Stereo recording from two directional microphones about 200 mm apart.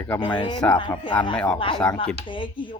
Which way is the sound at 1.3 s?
5° left (ahead or behind).